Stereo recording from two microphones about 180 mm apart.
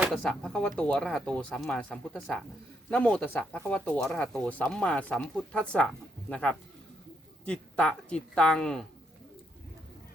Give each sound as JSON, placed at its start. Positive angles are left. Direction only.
{"t": 0.0, "sound": "a woman's voice", "side_deg": 5}